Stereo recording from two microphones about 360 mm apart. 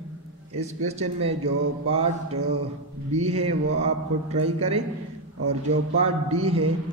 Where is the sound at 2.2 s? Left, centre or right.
Right.